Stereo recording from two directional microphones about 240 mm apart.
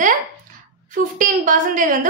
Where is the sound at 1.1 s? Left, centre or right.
Right.